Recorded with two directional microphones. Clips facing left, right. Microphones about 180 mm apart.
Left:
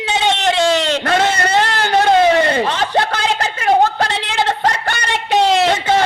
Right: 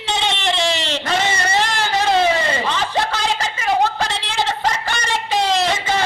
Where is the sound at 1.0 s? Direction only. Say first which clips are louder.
Left 5 dB; 60° left (ahead or behind).